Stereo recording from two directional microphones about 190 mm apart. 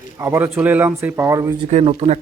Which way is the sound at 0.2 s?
10° right (ahead or behind).